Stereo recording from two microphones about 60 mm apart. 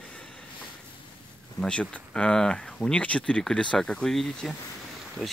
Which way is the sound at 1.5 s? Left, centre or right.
Centre.